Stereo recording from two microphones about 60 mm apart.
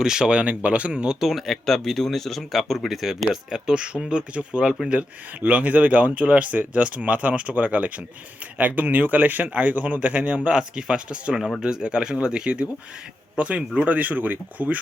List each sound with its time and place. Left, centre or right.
0.0 s speech: centre
1.2 s speech: centre; by 14.8 s right